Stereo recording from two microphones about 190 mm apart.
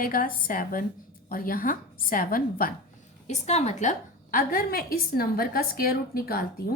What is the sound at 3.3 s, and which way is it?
A woman's voice, 35° left (ahead or behind).